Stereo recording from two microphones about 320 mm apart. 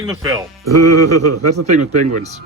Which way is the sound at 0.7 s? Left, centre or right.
Right.